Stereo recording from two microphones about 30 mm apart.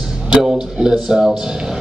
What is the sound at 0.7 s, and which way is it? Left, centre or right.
Speech, centre.